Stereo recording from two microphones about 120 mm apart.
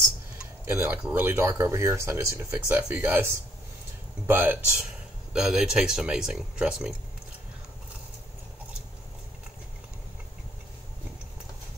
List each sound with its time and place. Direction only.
0.7 s speech: 20° right (ahead or behind)
5.3 s speech: 5° right (ahead or behind)